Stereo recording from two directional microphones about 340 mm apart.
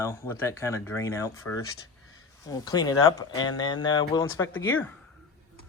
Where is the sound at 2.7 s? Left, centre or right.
Centre.